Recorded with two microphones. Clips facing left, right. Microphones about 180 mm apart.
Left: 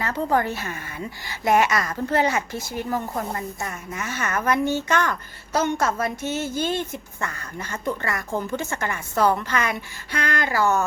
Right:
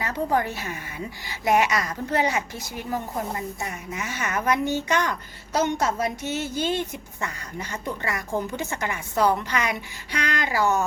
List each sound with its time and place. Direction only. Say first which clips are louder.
0.0 s a woman's voice: left 2 dB; 15° right (ahead or behind)